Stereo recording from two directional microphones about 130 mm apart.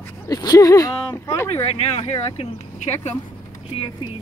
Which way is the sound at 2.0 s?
50° left (ahead or behind).